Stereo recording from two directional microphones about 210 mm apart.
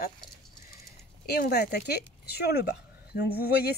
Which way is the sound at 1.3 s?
50° left (ahead or behind).